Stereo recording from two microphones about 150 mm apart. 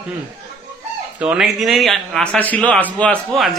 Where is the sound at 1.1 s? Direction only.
5° right (ahead or behind).